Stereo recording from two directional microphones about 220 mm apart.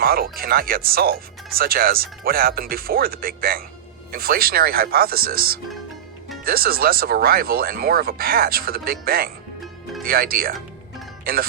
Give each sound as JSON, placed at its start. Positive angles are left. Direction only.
{"t": 0.0, "sound": "speech", "side_deg": -40}